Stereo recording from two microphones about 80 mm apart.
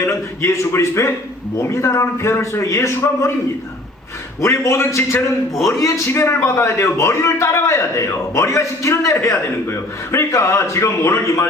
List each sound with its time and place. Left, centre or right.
0.4 s a man's voice: left
4.4 s a man's voice: left